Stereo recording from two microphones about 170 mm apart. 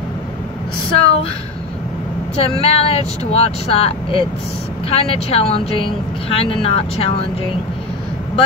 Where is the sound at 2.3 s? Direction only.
35° left (ahead or behind).